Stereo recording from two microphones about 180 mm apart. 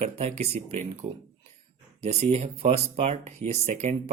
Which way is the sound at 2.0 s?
35° right (ahead or behind).